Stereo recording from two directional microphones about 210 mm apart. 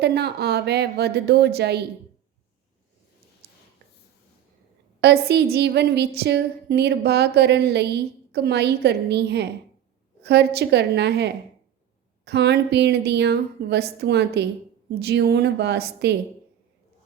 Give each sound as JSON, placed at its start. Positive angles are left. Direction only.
{"t": 0.0, "sound": "a woman's voice", "side_deg": -50}
{"t": 3.4, "sound": "a sound", "side_deg": -45}
{"t": 4.9, "sound": "a woman's voice", "side_deg": -50}